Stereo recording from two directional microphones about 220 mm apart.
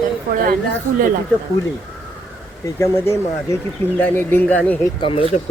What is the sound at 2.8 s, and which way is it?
Speech, 10° left (ahead or behind).